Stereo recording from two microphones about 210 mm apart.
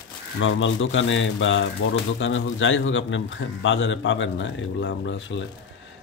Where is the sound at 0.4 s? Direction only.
65° left (ahead or behind).